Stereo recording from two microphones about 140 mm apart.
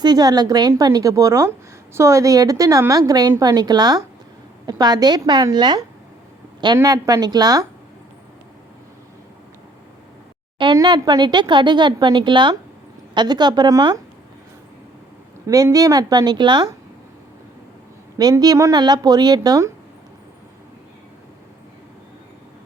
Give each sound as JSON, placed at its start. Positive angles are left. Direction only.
{"t": 0.0, "sound": "a woman's voice", "side_deg": -30}
{"t": 10.6, "sound": "a woman's voice", "side_deg": -35}
{"t": 15.4, "sound": "a woman's voice", "side_deg": -25}
{"t": 18.2, "sound": "a woman's voice", "side_deg": -30}